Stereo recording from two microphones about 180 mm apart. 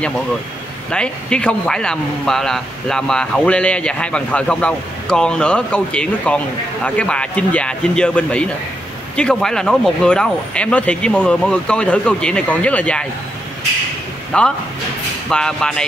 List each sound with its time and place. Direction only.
0.9 s speech: 5° left (ahead or behind)
14.3 s speech: 5° left (ahead or behind)